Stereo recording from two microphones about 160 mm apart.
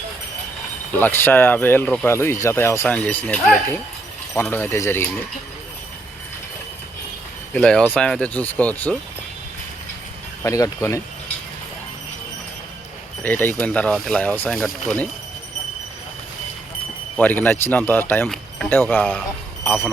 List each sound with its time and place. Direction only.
0.9 s speech: 10° left (ahead or behind)
7.5 s speech: 5° left (ahead or behind)
10.4 s speech: 20° left (ahead or behind)
13.2 s speech: 10° left (ahead or behind)
17.2 s speech: 10° left (ahead or behind)